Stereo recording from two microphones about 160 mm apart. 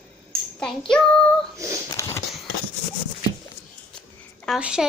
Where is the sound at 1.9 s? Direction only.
15° left (ahead or behind).